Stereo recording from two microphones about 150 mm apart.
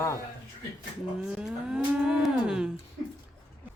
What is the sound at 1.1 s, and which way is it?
Speech, 5° right (ahead or behind).